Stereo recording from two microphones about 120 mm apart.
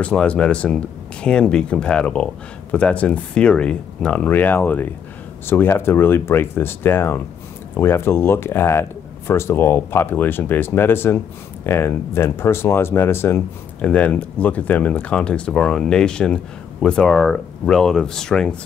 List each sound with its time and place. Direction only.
0.0 s speech: 10° left (ahead or behind)